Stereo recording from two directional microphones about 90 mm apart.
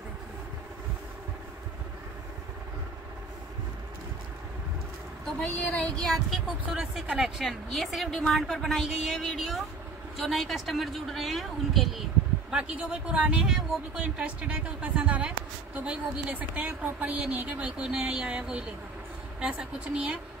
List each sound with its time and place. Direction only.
5.2 s speech: 10° left (ahead or behind)
6.0 s speech: centre (ahead or behind)
12.4 s speech: 10° right (ahead or behind)